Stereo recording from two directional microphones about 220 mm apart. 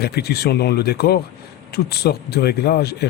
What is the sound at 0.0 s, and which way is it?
Speech, 45° left (ahead or behind).